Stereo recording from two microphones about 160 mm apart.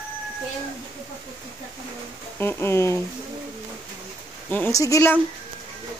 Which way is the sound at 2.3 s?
15° left (ahead or behind).